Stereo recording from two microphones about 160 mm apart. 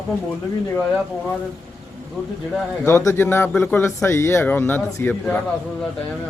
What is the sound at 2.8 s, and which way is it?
A man's voice, 20° left (ahead or behind).